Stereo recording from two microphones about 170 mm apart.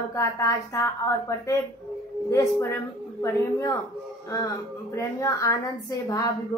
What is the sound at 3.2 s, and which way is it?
Speech, 20° left (ahead or behind).